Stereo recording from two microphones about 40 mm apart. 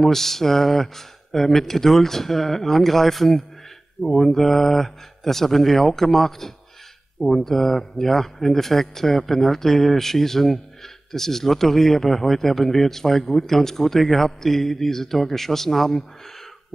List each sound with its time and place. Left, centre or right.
0.0 s speech: centre